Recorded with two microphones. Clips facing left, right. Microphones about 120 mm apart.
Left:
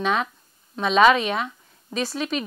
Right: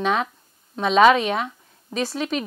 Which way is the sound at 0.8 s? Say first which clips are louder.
Right 2 dB; 50° right (ahead or behind).